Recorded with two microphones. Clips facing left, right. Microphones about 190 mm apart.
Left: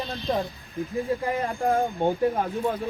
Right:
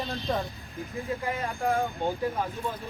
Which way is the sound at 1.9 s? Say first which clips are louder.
Left 5 dB; 15° left (ahead or behind).